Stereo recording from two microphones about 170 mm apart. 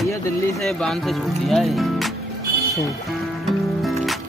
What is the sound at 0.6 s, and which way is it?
Speech, centre (ahead or behind).